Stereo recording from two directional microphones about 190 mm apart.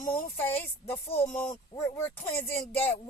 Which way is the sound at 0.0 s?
10° left (ahead or behind).